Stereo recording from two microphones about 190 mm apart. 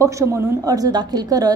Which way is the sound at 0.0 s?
15° right (ahead or behind).